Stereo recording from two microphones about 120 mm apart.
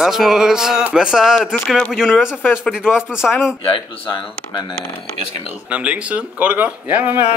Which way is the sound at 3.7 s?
45° left (ahead or behind).